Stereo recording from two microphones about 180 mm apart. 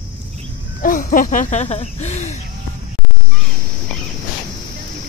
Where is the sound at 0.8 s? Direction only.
50° left (ahead or behind).